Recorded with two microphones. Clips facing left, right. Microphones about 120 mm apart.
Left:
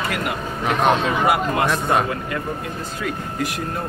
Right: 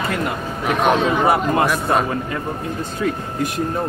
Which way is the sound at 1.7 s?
Centre (ahead or behind).